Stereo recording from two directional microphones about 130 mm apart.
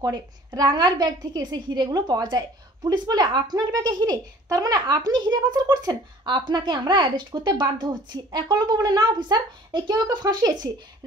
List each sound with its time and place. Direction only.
0.0 s a woman's voice: 30° right (ahead or behind)